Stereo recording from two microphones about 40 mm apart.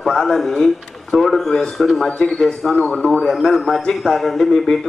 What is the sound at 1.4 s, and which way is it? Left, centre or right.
Speech, centre.